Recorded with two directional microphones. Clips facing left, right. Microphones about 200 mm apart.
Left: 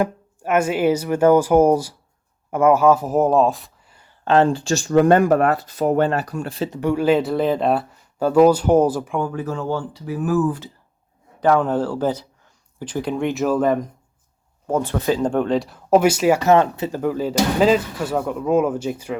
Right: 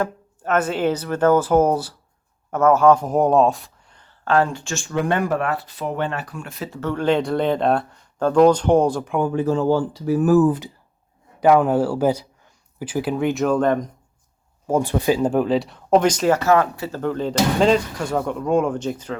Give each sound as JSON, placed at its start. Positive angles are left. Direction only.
{"t": 0.0, "sound": "speech", "side_deg": 10}
{"t": 4.3, "sound": "speech", "side_deg": 30}
{"t": 6.7, "sound": "speech", "side_deg": 15}
{"t": 9.2, "sound": "speech", "side_deg": -25}
{"t": 11.3, "sound": "speech", "side_deg": -10}
{"t": 14.7, "sound": "speech", "side_deg": -10}
{"t": 17.0, "sound": "speech", "side_deg": 5}